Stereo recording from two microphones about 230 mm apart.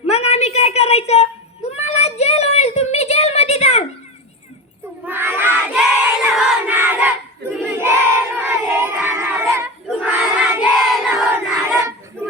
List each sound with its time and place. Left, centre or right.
0.1 s a sound: left
5.0 s crowd: centre
9.8 s battle cry: centre
11.2 s crowd: centre